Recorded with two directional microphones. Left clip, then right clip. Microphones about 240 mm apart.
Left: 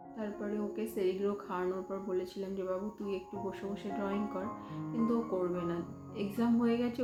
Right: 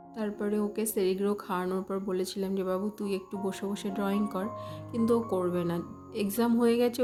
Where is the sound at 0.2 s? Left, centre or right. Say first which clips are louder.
Right 7 dB; right.